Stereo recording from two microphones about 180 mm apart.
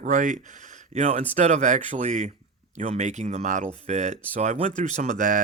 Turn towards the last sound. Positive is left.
turn(degrees=-45)  # may be behind; listen again after turning